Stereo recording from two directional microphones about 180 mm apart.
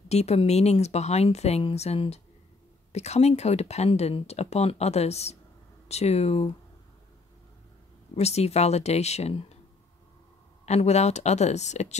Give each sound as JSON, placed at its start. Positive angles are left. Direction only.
{"t": 0.1, "sound": "speech", "side_deg": 35}
{"t": 8.2, "sound": "speech", "side_deg": 35}
{"t": 10.6, "sound": "speech", "side_deg": 35}